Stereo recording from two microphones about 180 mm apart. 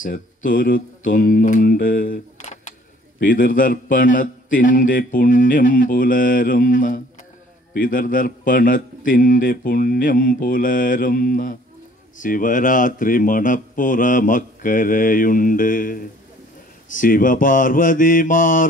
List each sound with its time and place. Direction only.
0.0 s a man's voice: 45° left (ahead or behind)